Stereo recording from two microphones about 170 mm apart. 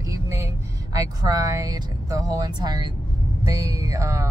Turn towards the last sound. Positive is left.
turn(degrees=-20)  # may be behind; listen again after turning